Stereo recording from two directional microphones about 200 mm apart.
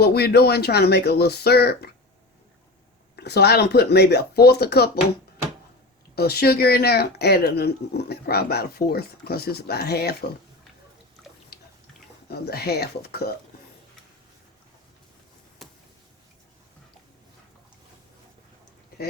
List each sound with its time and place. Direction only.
0.0 s speech: 50° left (ahead or behind)
3.2 s speech: 55° left (ahead or behind)
6.1 s speech: 50° left (ahead or behind)
12.3 s speech: 50° left (ahead or behind)
15.6 s a sound: centre (ahead or behind)